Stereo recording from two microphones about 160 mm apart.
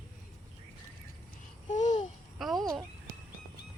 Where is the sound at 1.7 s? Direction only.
45° left (ahead or behind).